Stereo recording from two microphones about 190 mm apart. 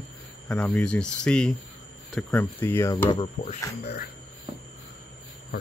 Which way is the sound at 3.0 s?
25° left (ahead or behind).